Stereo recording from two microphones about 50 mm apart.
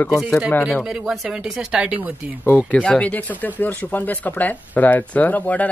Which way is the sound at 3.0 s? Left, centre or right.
Left.